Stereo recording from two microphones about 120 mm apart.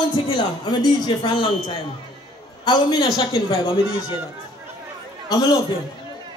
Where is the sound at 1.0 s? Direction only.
40° left (ahead or behind).